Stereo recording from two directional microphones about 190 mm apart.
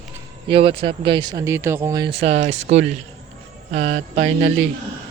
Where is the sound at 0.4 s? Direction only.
30° right (ahead or behind).